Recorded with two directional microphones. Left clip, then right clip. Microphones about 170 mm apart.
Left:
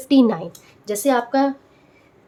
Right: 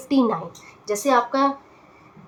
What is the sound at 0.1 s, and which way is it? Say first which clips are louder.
A woman's voice: left 4 dB; 40° left (ahead or behind).